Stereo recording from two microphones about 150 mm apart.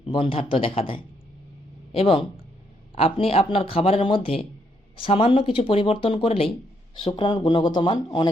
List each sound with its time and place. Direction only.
0.0 s speech: 35° left (ahead or behind)